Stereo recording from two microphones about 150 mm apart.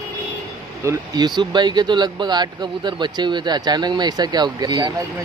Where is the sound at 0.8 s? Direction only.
30° right (ahead or behind).